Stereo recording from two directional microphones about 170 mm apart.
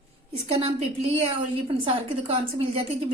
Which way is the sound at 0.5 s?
35° right (ahead or behind).